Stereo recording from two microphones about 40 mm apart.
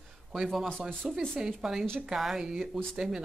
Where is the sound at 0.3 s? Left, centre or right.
Centre.